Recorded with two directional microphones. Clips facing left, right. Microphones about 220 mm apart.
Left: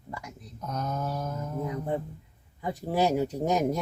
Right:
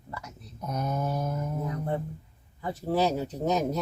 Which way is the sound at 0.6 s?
10° right (ahead or behind).